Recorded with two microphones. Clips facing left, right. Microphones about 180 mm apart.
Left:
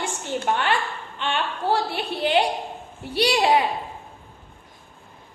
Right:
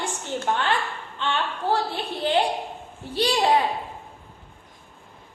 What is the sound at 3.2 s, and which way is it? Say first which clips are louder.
Speech: left 2 dB; 10° left (ahead or behind).